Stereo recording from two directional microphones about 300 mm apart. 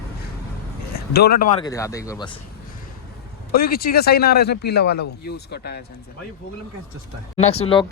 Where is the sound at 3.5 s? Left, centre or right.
Left.